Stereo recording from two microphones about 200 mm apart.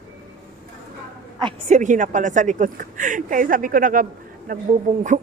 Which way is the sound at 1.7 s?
40° right (ahead or behind).